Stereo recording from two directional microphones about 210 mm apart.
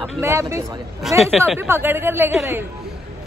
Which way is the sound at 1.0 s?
Centre (ahead or behind).